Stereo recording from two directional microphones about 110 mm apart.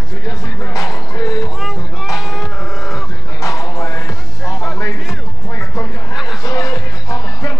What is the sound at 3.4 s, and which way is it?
Music, 30° left (ahead or behind).